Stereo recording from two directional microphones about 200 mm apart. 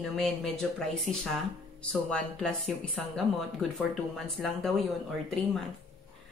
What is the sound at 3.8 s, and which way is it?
A woman's voice, centre (ahead or behind).